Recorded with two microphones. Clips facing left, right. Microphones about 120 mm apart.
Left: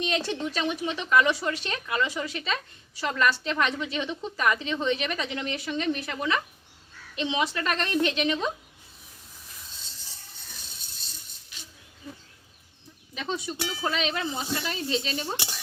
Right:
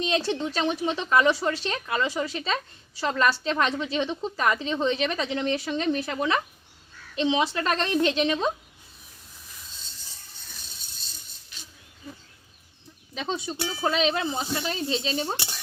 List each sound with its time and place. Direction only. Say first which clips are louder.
0.0 s speech: right 3 dB; 30° right (ahead or behind)
13.1 s speech: right 1 dB; 30° right (ahead or behind)